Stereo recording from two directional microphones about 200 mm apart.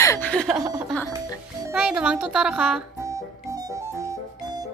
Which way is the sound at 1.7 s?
5° right (ahead or behind).